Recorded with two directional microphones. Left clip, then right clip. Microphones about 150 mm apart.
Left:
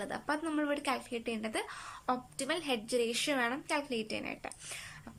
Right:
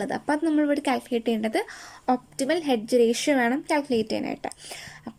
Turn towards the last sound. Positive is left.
turn(degrees=-45)  # may be behind; listen again after turning